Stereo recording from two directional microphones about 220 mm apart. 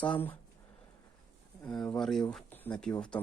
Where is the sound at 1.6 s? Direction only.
5° left (ahead or behind).